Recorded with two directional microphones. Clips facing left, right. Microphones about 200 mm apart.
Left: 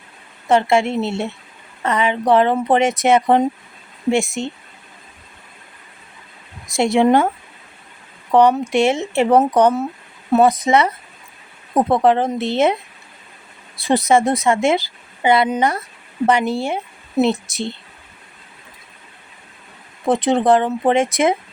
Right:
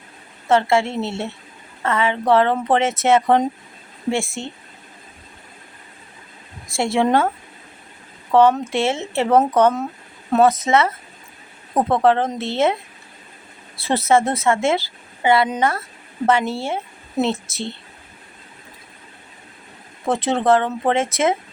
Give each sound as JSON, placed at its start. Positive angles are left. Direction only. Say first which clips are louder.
{"t": 0.4, "sound": "speech", "louder": "left 2 dB", "side_deg": 15}
{"t": 6.7, "sound": "speech", "louder": "left 4 dB", "side_deg": 20}
{"t": 8.3, "sound": "speech", "louder": "left 1 dB", "side_deg": 15}
{"t": 13.8, "sound": "speech", "louder": "left 2 dB", "side_deg": 15}
{"t": 20.1, "sound": "speech", "louder": "left 3 dB", "side_deg": 15}